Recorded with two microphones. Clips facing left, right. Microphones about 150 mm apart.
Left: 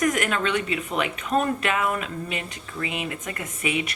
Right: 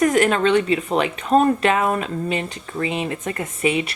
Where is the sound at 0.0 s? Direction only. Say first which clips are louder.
Right 7 dB; 30° right (ahead or behind).